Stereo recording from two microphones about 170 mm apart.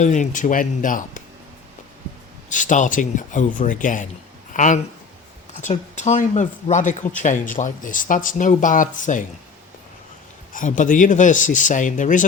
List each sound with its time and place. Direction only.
0.0 s speech: 45° left (ahead or behind)
2.5 s speech: 50° left (ahead or behind)
10.5 s speech: 50° left (ahead or behind)